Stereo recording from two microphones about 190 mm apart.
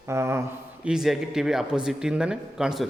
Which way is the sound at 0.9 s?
5° right (ahead or behind).